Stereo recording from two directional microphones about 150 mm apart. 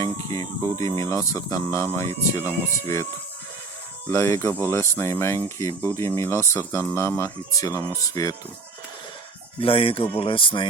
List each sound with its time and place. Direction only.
0.0 s speech: 20° left (ahead or behind)
4.1 s speech: 20° left (ahead or behind)
9.6 s speech: 40° left (ahead or behind)